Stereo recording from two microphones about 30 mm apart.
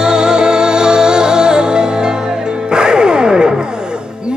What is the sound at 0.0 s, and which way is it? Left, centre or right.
Music, right.